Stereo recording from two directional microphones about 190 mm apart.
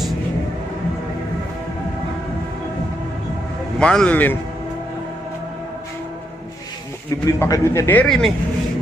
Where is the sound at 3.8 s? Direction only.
5° left (ahead or behind).